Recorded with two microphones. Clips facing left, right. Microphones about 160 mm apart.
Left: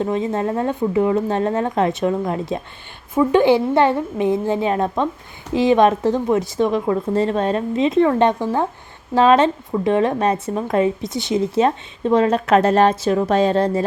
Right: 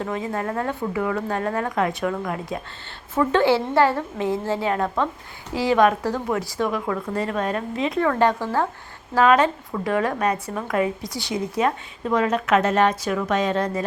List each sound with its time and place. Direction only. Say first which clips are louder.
0.0 s speech: left 6 dB; 20° left (ahead or behind)
3.2 s speech: left 5 dB; 15° left (ahead or behind); by 13.8 s 30° left (ahead or behind)